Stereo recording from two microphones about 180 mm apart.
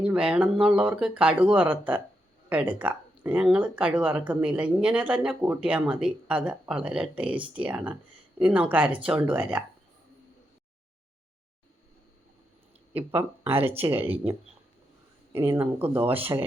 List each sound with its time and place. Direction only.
0.0 s speech: 5° right (ahead or behind)
13.0 s speech: 10° right (ahead or behind)
13.5 s speech: 35° right (ahead or behind)
15.3 s speech: 15° right (ahead or behind)